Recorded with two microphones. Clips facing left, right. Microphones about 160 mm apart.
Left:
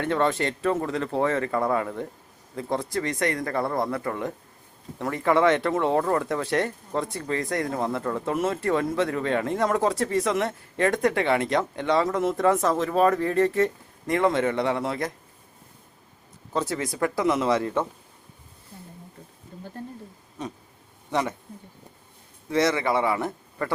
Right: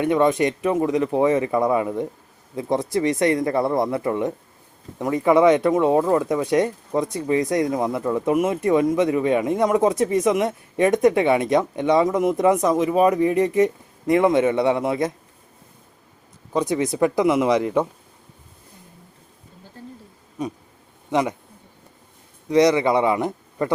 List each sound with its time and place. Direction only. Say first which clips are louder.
0.0 s speech: right 6 dB; 15° right (ahead or behind)
16.5 s speech: right 6 dB; 15° right (ahead or behind)
20.4 s a man's voice: right 6 dB; 10° right (ahead or behind)
22.4 s speech: right 6 dB; 15° right (ahead or behind)